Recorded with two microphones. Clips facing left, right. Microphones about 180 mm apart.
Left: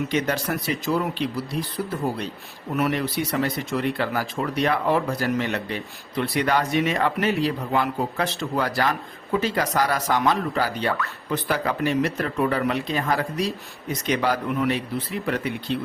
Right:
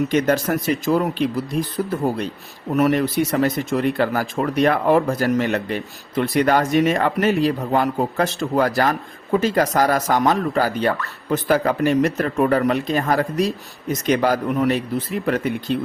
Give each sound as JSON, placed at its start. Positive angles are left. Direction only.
{"t": 0.1, "sound": "speech", "side_deg": -45}